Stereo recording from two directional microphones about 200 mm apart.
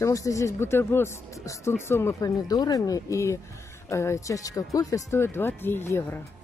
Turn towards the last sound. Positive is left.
turn(degrees=10)  # may be behind; listen again after turning